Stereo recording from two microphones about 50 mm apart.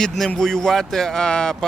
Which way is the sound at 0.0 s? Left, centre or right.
Centre.